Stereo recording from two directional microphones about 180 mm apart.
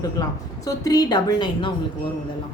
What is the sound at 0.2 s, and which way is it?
A woman's voice, 20° left (ahead or behind).